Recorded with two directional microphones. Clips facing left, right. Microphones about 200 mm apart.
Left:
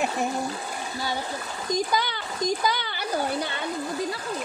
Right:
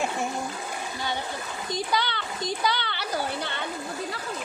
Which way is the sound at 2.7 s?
10° left (ahead or behind).